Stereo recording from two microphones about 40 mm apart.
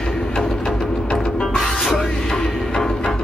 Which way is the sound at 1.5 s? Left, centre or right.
Centre.